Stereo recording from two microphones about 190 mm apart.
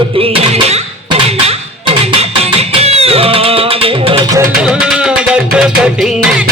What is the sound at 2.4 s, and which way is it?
Music, 35° right (ahead or behind).